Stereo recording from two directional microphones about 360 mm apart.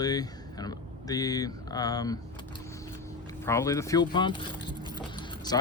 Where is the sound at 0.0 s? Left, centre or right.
Centre.